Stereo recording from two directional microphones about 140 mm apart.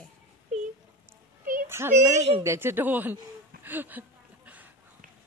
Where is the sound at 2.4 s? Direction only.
15° right (ahead or behind).